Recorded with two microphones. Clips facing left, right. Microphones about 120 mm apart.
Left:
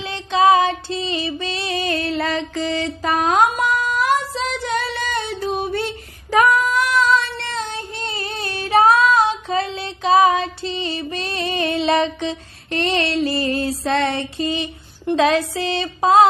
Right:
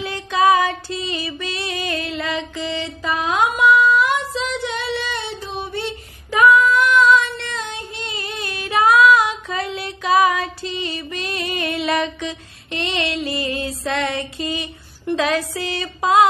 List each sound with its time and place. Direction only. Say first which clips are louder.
0.0 s female singing: left 1 dB; 25° left (ahead or behind)